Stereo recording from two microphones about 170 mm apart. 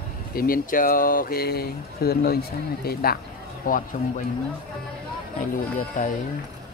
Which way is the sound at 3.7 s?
55° left (ahead or behind).